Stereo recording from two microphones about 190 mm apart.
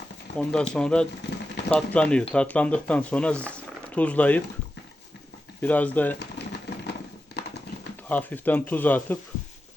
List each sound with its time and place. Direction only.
0.3 s speech: 5° left (ahead or behind)
5.6 s speech: 10° left (ahead or behind)
6.1 s a sound: 60° left (ahead or behind)
8.0 s speech: 10° left (ahead or behind)